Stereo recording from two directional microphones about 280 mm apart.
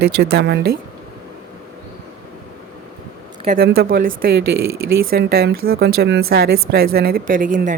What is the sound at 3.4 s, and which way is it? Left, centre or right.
Speech, right.